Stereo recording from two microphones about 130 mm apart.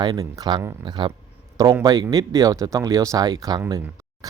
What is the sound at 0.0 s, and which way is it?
A man's voice, 30° right (ahead or behind).